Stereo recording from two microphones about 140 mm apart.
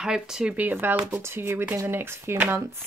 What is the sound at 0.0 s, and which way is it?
Speech, 5° right (ahead or behind).